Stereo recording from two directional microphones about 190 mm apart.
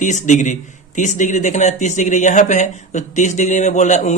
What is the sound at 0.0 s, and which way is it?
Speech, 40° left (ahead or behind).